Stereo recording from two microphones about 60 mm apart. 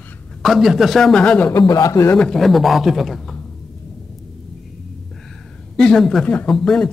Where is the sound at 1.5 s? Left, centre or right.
Left.